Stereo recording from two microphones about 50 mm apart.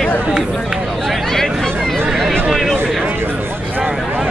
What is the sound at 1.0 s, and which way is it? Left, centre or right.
Chatter, centre.